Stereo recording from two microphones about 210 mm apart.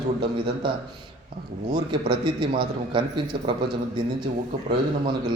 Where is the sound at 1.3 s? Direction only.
25° right (ahead or behind).